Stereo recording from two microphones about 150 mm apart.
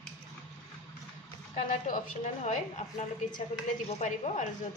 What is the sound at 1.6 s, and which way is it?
A woman's voice, 60° left (ahead or behind).